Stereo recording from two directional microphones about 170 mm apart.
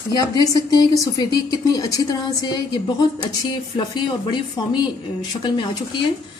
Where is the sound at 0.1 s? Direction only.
20° left (ahead or behind).